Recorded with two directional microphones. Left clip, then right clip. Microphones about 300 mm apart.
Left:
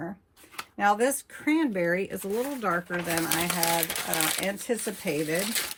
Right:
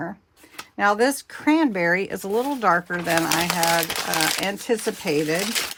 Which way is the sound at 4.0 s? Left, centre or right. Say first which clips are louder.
Right 6 dB; right.